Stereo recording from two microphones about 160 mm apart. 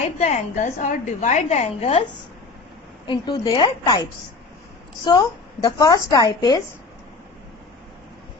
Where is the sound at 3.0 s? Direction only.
25° left (ahead or behind).